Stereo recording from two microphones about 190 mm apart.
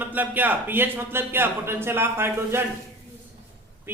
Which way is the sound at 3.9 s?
10° right (ahead or behind).